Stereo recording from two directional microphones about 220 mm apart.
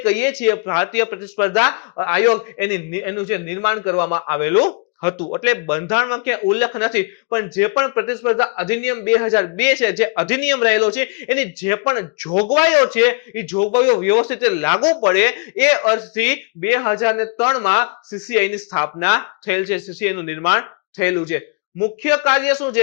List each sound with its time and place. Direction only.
0.0 s speech: 15° left (ahead or behind)
4.6 s speech: 30° left (ahead or behind)
5.4 s speech: 15° left (ahead or behind)
12.3 s speech: 35° left (ahead or behind)
12.5 s speech: 20° left (ahead or behind)
13.6 s speech: 25° left (ahead or behind)